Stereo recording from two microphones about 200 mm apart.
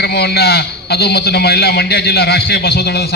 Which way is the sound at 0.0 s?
55° left (ahead or behind).